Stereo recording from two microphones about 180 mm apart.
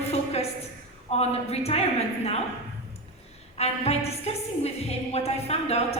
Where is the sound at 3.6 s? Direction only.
35° left (ahead or behind).